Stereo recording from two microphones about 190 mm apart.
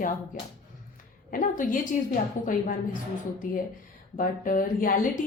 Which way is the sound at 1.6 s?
45° left (ahead or behind).